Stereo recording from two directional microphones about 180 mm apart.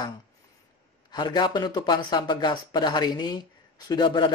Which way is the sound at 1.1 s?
25° left (ahead or behind).